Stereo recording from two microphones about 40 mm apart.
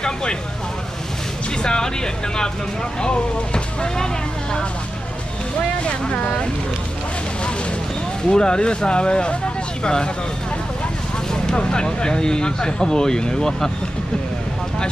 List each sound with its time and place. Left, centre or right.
0.0 s speech: left
1.6 s speech: centre
3.0 s speech: left
5.9 s speech: left
8.3 s speech: centre
11.4 s speech: left